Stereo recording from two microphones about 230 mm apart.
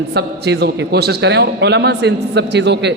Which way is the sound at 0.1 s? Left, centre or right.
Right.